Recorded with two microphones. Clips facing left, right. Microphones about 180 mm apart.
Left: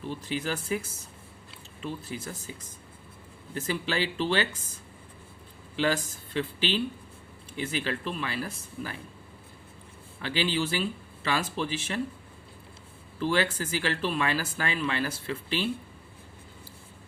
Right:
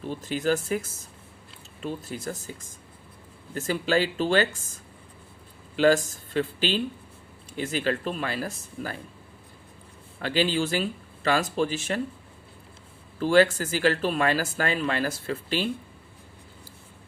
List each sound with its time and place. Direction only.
0.1 s speech: 45° right (ahead or behind)
1.8 s speech: 45° right (ahead or behind)
10.2 s speech: 45° right (ahead or behind)
13.1 s speech: 45° right (ahead or behind)